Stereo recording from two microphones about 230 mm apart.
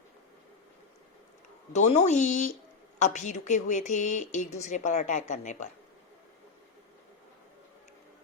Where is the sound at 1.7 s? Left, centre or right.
Left.